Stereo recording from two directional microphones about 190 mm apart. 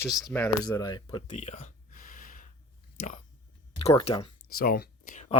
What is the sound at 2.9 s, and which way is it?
Speech, 40° left (ahead or behind).